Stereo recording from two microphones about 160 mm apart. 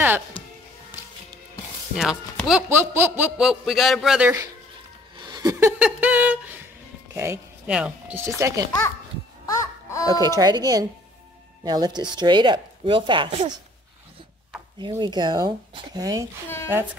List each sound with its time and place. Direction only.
2.0 s a man's voice: centre (ahead or behind)
2.7 s a man's voice: 15° right (ahead or behind)
5.1 s a sound: 25° right (ahead or behind)
5.8 s speech: 10° right (ahead or behind)
9.5 s music: 20° left (ahead or behind)
10.2 s speech: 25° right (ahead or behind)
13.3 s speech: 45° right (ahead or behind)
14.8 s speech: 30° right (ahead or behind)